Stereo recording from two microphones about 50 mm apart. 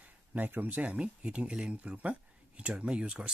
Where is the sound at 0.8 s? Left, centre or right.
Right.